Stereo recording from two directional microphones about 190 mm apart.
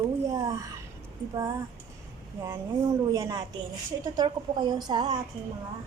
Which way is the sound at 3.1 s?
15° right (ahead or behind).